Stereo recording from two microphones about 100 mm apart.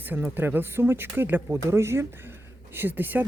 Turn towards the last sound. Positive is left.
turn(degrees=-20)  # may be behind; listen again after turning